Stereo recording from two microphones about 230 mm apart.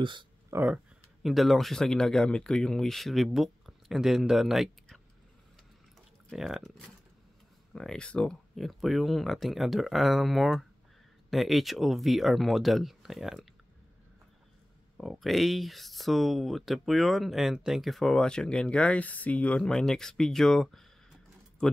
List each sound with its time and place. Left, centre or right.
0.0 s a sound: right
1.2 s speech: centre
6.3 s speech: centre
15.0 s speech: centre